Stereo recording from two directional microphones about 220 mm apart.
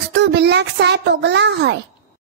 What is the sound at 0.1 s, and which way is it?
A child's voice, 50° right (ahead or behind).